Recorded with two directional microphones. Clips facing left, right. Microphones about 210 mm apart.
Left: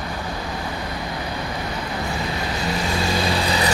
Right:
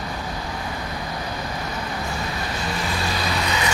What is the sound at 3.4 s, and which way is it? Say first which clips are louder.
Filing: left 3 dB; 35° left (ahead or behind).